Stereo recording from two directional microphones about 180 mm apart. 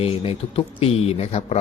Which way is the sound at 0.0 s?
30° left (ahead or behind).